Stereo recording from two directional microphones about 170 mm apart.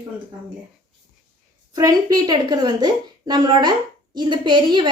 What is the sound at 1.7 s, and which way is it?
A woman's voice, 20° right (ahead or behind).